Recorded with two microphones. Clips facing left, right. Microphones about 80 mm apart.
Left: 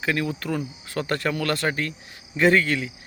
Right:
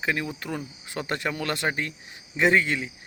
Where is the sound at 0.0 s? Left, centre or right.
Centre.